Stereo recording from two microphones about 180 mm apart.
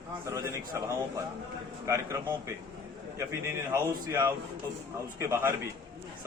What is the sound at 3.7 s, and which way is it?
A man's voice, 15° right (ahead or behind).